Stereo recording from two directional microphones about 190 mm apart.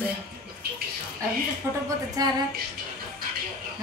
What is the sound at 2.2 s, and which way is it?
Speech, 20° right (ahead or behind).